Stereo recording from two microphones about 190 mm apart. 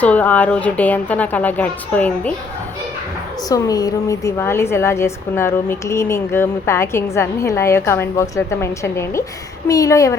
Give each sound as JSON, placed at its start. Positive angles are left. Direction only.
{"t": 0.0, "sound": "a woman's voice", "side_deg": 10}
{"t": 3.5, "sound": "a woman's voice", "side_deg": 20}